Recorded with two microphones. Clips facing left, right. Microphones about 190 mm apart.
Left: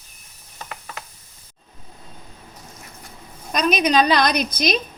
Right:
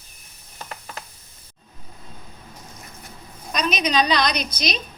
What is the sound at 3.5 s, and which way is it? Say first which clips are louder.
A woman's voice: left 4 dB; 50° left (ahead or behind).